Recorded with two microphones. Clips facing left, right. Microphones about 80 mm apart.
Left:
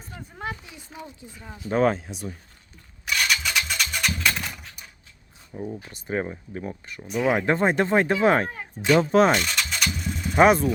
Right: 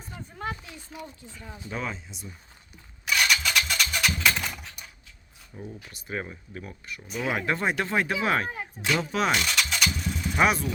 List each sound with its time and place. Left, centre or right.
0.3 s a sound: centre
0.9 s speech: centre
1.7 s speech: left
3.1 s a sound: centre
5.7 s speech: left
7.1 s speech: centre
7.4 s speech: left
8.4 s speech: centre
9.0 s speech: left
9.3 s vehicle: centre
10.3 s speech: left